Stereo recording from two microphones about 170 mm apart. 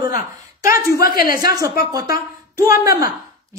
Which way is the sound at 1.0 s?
60° left (ahead or behind).